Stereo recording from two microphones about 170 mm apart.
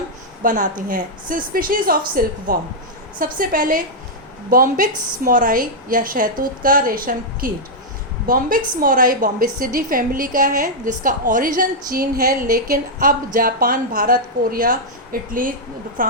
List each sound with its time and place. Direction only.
0.4 s a woman's voice: 55° right (ahead or behind)